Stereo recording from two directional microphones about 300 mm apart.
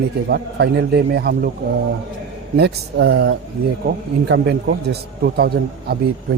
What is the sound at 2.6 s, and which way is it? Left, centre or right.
Speech, right.